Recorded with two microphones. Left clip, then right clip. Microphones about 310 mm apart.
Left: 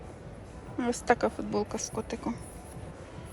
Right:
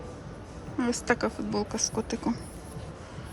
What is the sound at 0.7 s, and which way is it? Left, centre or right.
Speech, centre.